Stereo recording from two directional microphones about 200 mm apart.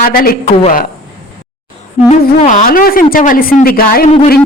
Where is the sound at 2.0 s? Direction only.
35° left (ahead or behind).